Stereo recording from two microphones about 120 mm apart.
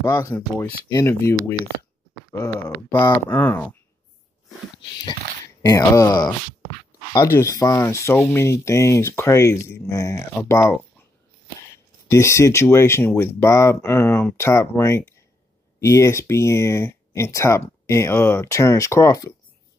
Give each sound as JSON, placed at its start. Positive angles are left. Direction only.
{"t": 0.0, "sound": "speech", "side_deg": 30}
{"t": 2.9, "sound": "speech", "side_deg": 15}
{"t": 5.6, "sound": "speech", "side_deg": 30}
{"t": 7.2, "sound": "speech", "side_deg": 20}
{"t": 12.1, "sound": "speech", "side_deg": 25}